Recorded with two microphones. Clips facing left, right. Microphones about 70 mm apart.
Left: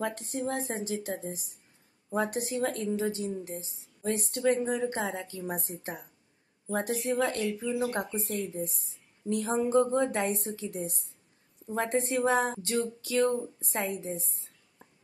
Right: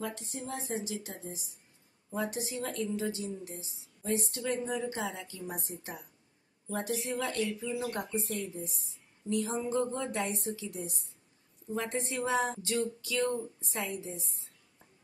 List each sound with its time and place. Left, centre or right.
0.0 s a woman's voice: left